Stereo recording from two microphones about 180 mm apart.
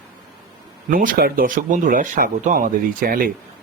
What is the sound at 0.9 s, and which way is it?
Speech, 50° right (ahead or behind).